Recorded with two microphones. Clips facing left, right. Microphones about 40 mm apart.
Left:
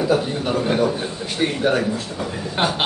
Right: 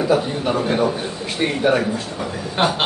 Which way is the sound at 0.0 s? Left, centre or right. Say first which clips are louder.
Right 1 dB; centre.